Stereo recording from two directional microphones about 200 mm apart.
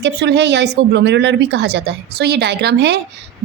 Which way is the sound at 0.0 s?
60° right (ahead or behind).